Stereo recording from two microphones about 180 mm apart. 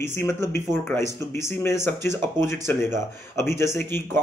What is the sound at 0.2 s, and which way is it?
Speech, 15° left (ahead or behind).